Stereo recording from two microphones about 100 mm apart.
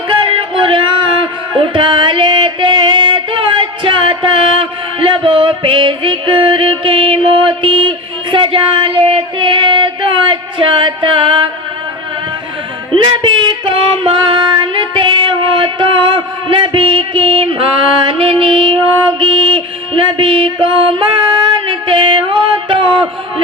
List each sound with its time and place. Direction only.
0.2 s music: 60° right (ahead or behind)
12.9 s music: 55° right (ahead or behind)
21.7 s a sound: 55° right (ahead or behind)